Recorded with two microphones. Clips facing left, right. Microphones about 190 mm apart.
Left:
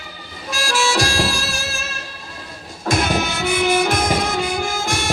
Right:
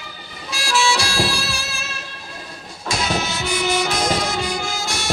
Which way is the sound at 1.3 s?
50° left (ahead or behind).